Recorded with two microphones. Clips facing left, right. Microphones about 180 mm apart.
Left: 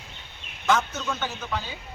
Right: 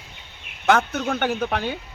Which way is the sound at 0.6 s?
60° right (ahead or behind).